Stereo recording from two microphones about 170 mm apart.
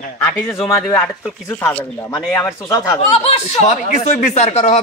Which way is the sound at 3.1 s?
40° left (ahead or behind).